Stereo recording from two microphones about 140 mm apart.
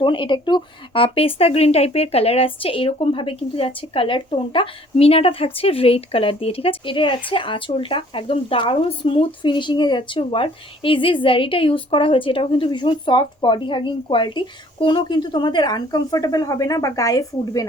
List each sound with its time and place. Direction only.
0.0 s speech: 35° left (ahead or behind)